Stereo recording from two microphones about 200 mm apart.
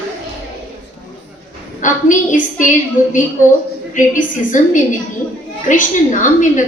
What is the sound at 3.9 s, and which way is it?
A woman's voice, 40° left (ahead or behind).